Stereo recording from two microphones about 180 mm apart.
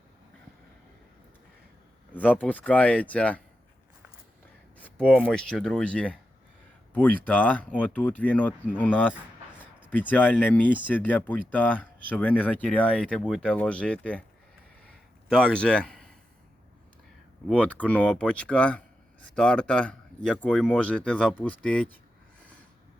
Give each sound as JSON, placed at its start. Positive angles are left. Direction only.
{"t": 2.1, "sound": "speech", "side_deg": 10}
{"t": 4.8, "sound": "speech", "side_deg": 5}
{"t": 15.3, "sound": "speech", "side_deg": 5}
{"t": 17.5, "sound": "speech", "side_deg": 5}